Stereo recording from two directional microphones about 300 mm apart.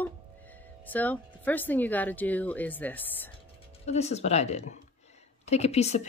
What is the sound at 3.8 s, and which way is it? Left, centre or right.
Speech, left.